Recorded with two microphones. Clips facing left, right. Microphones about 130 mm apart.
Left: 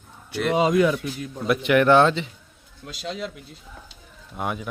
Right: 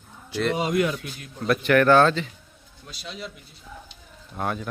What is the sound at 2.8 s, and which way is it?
Speech, 90° left.